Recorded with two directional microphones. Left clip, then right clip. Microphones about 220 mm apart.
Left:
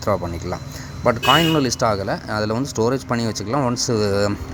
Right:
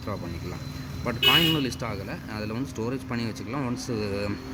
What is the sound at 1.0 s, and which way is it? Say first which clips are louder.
Speech: left 5 dB; 10° left (ahead or behind).